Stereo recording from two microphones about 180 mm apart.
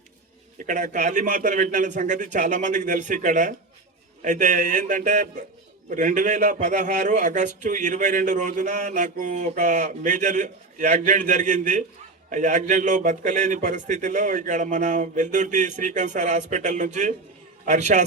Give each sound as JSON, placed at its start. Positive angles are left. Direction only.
{"t": 0.7, "sound": "a man's voice", "side_deg": -45}